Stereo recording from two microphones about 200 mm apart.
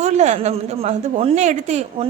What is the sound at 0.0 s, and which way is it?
A woman's voice, 35° right (ahead or behind).